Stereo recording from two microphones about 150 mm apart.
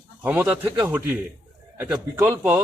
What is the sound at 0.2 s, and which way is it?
A man's voice, 10° right (ahead or behind).